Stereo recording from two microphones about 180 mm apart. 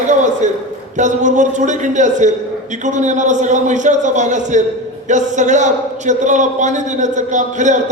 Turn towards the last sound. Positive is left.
turn(degrees=-45)  # may be behind; listen again after turning